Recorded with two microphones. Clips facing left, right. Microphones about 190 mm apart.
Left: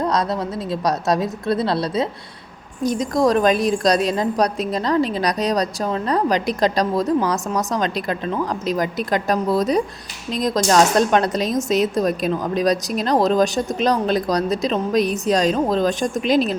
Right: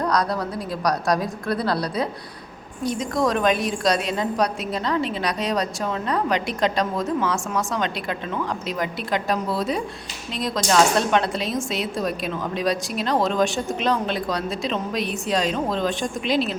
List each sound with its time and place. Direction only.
0.0 s a woman's voice: 25° left (ahead or behind)
2.8 s a woman's voice: 40° left (ahead or behind)